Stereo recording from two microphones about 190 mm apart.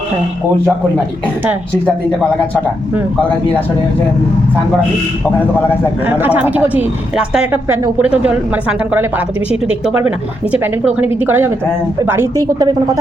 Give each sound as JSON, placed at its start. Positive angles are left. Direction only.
{"t": 6.1, "sound": "a woman's voice", "side_deg": -10}